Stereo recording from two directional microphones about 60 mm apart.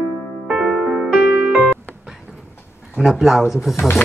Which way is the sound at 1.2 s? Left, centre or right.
Right.